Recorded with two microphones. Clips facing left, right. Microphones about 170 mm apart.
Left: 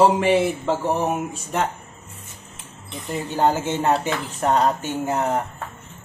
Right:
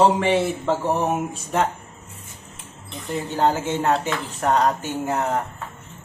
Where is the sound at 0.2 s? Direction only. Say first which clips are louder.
Left 2 dB; 5° left (ahead or behind).